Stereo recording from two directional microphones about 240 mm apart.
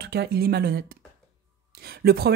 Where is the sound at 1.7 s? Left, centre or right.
Right.